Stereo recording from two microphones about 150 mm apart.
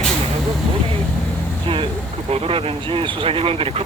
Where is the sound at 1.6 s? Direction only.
35° right (ahead or behind).